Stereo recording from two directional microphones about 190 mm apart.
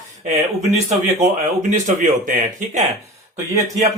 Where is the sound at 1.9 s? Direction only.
45° right (ahead or behind).